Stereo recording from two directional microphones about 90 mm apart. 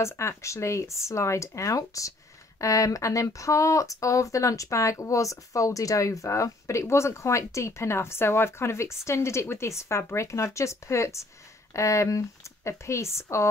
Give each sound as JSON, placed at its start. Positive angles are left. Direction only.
{"t": 0.0, "sound": "speech", "side_deg": 30}